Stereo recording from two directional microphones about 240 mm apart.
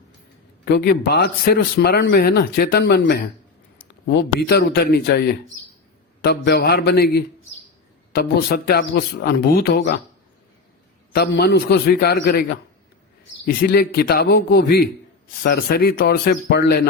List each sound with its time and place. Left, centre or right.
0.6 s a man's voice: left
11.1 s a man's voice: left